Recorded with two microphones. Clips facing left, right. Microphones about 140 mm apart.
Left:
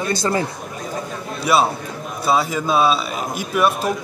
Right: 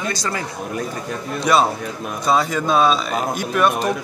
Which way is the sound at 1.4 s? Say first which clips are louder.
Even; 5° left (ahead or behind).